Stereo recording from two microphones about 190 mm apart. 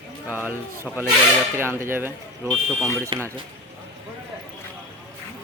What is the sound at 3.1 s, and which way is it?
Speech, 25° right (ahead or behind).